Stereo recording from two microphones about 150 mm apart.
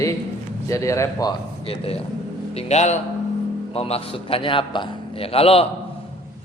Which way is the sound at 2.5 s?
50° left (ahead or behind).